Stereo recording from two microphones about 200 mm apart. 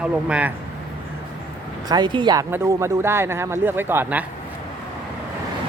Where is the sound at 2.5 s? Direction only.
10° right (ahead or behind).